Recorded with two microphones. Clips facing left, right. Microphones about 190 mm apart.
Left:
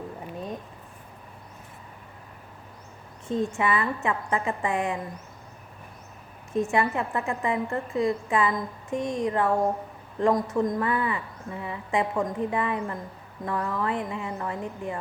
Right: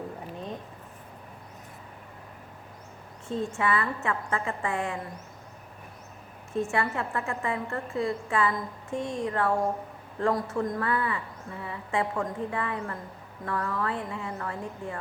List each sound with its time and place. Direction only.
3.2 s a woman's voice: 15° left (ahead or behind)
6.5 s a woman's voice: 15° left (ahead or behind)